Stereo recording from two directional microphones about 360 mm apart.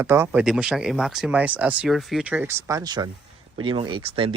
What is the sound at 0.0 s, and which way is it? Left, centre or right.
Speech, centre.